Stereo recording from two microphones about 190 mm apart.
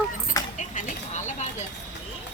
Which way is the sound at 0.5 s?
40° left (ahead or behind).